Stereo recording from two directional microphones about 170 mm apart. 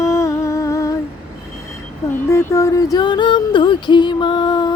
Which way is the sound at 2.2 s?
15° left (ahead or behind).